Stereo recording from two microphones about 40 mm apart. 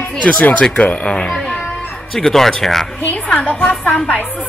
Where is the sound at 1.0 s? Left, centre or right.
Left.